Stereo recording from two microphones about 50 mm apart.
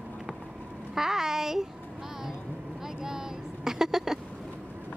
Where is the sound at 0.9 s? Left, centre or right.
Centre.